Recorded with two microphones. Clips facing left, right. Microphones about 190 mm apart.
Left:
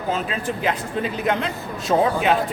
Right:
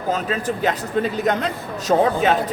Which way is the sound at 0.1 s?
40° right (ahead or behind).